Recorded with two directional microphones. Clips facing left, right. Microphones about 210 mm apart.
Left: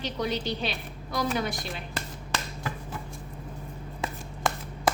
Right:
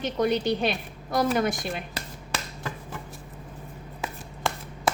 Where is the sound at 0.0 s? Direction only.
50° right (ahead or behind).